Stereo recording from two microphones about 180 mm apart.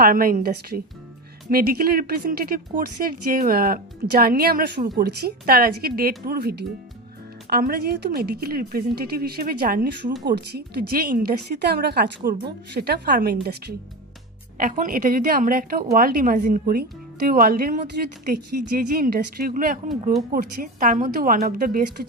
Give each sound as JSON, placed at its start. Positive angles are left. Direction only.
{"t": 0.0, "sound": "speech", "side_deg": -55}
{"t": 10.2, "sound": "speech", "side_deg": -65}
{"t": 14.6, "sound": "a woman's voice", "side_deg": -50}